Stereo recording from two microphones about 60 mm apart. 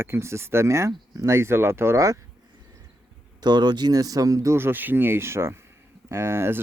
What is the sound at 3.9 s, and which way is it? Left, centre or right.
Speech, right.